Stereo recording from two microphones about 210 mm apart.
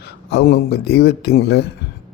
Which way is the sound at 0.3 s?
50° left (ahead or behind).